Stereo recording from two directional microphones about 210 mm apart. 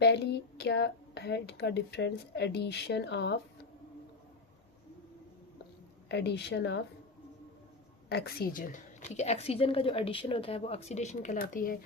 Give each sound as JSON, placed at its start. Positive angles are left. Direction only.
{"t": 0.0, "sound": "speech", "side_deg": 50}
{"t": 6.1, "sound": "speech", "side_deg": 55}
{"t": 8.1, "sound": "a woman's voice", "side_deg": 45}